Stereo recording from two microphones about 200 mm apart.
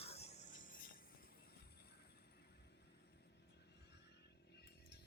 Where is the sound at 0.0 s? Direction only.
30° left (ahead or behind).